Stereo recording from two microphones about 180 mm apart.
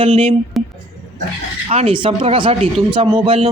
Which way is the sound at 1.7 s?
30° right (ahead or behind).